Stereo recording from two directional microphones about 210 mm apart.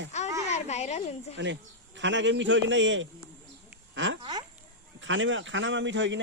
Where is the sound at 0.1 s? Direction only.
35° left (ahead or behind).